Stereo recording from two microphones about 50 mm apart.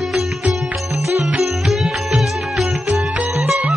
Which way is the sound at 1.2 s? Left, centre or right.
Centre.